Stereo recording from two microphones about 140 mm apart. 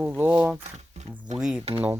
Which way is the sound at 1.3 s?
5° right (ahead or behind).